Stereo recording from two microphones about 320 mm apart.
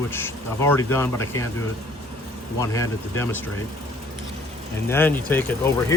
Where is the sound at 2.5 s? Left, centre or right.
Centre.